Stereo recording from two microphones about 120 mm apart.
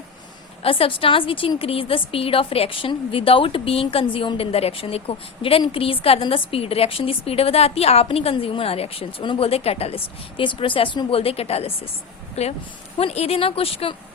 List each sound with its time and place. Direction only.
0.6 s a woman's voice: 50° left (ahead or behind)